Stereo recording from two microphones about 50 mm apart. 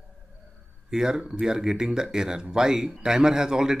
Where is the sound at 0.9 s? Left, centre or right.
Centre.